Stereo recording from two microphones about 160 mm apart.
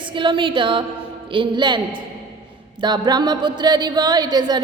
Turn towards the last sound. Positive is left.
turn(degrees=-25)  # may be behind; listen again after turning